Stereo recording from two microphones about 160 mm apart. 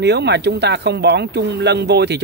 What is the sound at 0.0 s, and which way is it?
A man's voice, 90° right.